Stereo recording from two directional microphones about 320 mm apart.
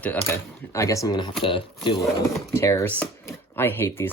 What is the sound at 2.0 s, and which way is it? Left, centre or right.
Speech, centre.